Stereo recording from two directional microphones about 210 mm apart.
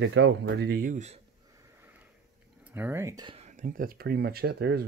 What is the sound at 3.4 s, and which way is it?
Speech, 35° right (ahead or behind).